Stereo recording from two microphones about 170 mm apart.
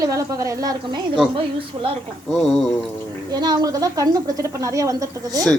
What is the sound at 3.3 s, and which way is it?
Speech, 25° right (ahead or behind).